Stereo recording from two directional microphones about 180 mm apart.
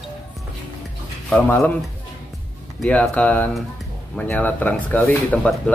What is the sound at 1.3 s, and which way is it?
Speech, 5° left (ahead or behind).